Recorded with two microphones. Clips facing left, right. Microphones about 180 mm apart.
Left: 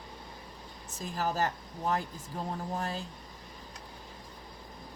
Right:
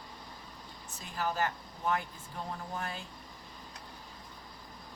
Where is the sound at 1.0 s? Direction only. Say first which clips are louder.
Left 2 dB; 40° left (ahead or behind).